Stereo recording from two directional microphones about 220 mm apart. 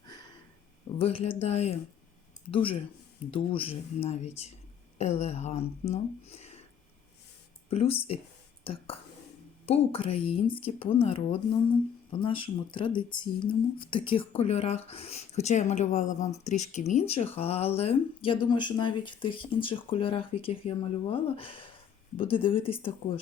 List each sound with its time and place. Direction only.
0.9 s speech: 25° left (ahead or behind)
7.7 s speech: 25° left (ahead or behind)